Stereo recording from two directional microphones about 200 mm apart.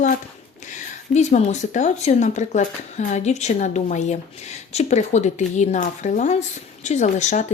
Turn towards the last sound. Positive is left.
turn(degrees=35)  # may be behind; listen again after turning